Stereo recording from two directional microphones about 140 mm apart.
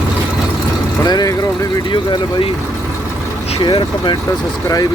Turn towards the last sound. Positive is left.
turn(degrees=35)  # may be behind; listen again after turning